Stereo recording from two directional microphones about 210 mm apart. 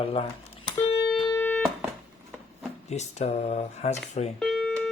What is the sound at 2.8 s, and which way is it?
Speech, 30° left (ahead or behind).